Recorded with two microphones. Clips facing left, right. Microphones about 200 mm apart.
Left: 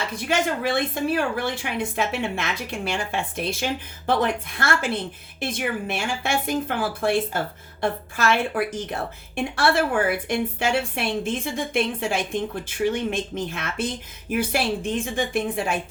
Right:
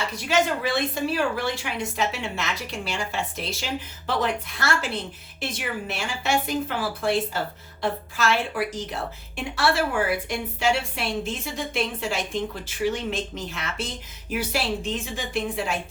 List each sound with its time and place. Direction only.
0.3 s speech: 55° left (ahead or behind)